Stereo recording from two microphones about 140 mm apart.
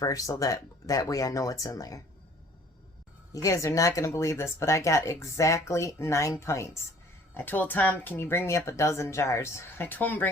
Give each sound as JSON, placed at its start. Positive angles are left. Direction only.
{"t": 0.0, "sound": "speech", "side_deg": 25}
{"t": 3.3, "sound": "speech", "side_deg": 25}